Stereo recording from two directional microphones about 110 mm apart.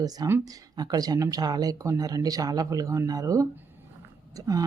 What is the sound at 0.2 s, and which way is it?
Speech, 35° right (ahead or behind).